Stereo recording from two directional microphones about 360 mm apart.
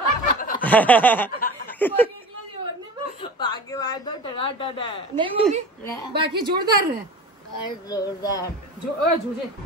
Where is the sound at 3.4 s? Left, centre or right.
Centre.